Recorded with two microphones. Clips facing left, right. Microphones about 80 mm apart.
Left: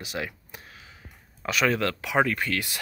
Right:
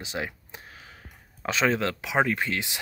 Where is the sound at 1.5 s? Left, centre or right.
Right.